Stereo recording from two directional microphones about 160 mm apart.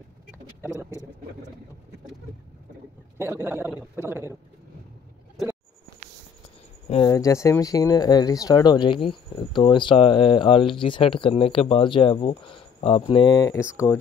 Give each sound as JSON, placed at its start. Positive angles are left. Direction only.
{"t": 3.2, "sound": "a man's voice", "side_deg": -15}
{"t": 7.0, "sound": "speech", "side_deg": 20}